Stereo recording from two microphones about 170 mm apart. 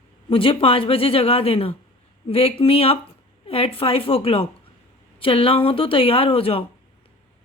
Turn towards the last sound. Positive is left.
turn(degrees=35)  # may be behind; listen again after turning